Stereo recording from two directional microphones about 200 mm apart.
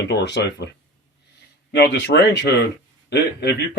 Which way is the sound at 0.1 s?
60° left (ahead or behind).